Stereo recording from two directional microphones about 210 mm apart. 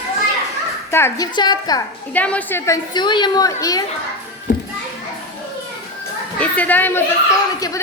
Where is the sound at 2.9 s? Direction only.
20° left (ahead or behind).